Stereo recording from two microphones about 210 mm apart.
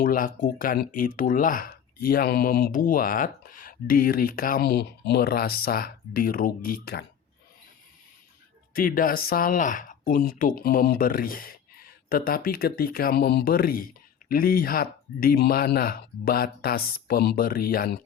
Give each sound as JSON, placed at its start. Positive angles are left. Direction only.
{"t": 0.0, "sound": "speech", "side_deg": 40}
{"t": 8.7, "sound": "speech", "side_deg": 40}